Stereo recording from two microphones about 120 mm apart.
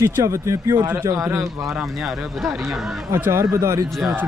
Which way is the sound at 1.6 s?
Centre (ahead or behind).